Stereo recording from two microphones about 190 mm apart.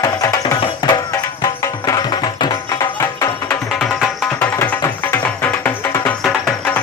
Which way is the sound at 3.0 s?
10° left (ahead or behind).